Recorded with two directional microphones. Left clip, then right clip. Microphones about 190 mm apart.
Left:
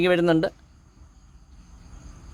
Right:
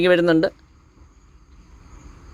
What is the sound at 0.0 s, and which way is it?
Speech, 5° right (ahead or behind).